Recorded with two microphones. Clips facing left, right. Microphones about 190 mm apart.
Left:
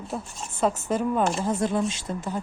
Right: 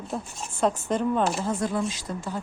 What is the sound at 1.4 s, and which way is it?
Speech, 25° left (ahead or behind).